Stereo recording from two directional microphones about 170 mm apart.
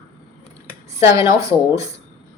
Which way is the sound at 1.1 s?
20° right (ahead or behind).